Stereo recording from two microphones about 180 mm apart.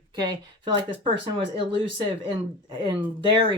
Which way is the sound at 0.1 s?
25° right (ahead or behind).